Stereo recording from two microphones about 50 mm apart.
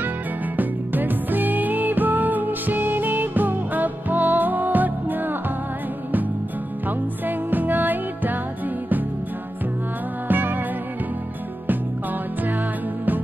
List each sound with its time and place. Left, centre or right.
0.6 s music: right
7.2 s music: right
10.2 s music: right